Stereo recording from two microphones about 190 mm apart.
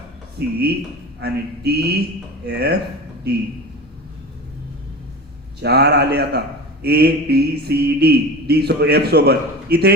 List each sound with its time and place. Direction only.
0.3 s mantra: 55° right (ahead or behind)
5.6 s mantra: 60° right (ahead or behind)